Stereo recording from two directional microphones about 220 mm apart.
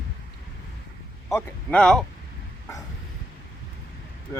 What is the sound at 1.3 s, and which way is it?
Speech, 5° left (ahead or behind).